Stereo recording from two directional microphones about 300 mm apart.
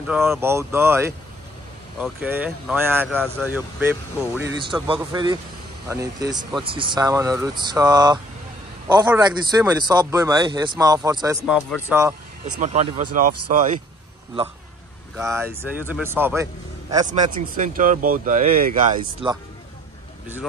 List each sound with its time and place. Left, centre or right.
0.0 s a man's voice: centre
12.5 s speech: right
15.1 s a man's voice: centre
17.1 s speech: right